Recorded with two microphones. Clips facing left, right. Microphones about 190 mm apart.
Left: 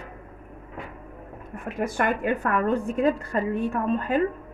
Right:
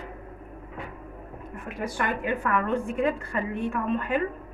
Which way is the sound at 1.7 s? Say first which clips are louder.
Left 4 dB; 45° left (ahead or behind).